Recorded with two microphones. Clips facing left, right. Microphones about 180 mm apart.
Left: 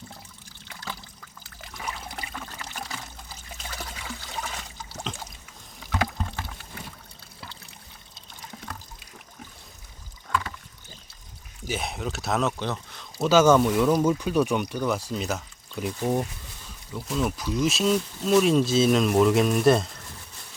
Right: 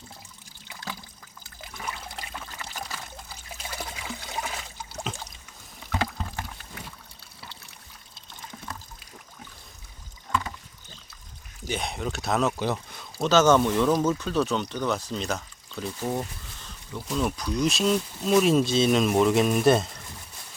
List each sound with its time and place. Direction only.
4.4 s water: 5° right (ahead or behind)
5.1 s boat: 5° right (ahead or behind)
11.7 s speech: 5° left (ahead or behind)
13.1 s speech: 10° left (ahead or behind)
16.6 s speech: 5° left (ahead or behind)